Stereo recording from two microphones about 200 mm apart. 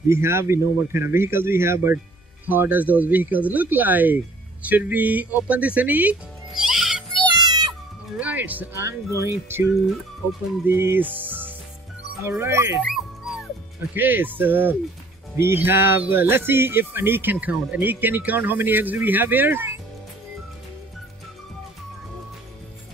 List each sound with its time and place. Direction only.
0.1 s speech: 15° right (ahead or behind)
7.3 s music: 20° right (ahead or behind)
8.2 s speech: 10° right (ahead or behind)
10.7 s speech: 10° right (ahead or behind)
12.8 s dog: centre (ahead or behind)
13.9 s speech: 10° right (ahead or behind)